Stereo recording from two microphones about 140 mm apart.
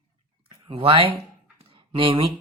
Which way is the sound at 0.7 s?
40° right (ahead or behind).